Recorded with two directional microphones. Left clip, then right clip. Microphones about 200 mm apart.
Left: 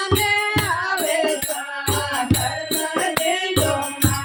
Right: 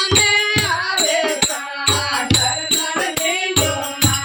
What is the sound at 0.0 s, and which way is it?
Music, centre (ahead or behind).